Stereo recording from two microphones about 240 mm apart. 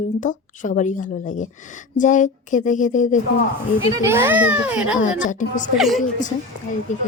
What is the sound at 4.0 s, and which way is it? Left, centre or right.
A child's voice, centre.